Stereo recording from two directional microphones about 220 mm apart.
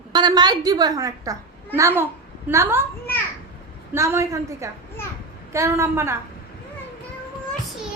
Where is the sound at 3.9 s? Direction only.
10° right (ahead or behind).